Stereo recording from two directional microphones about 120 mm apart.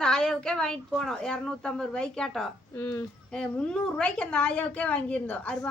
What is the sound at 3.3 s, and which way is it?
A woman's voice, 5° left (ahead or behind).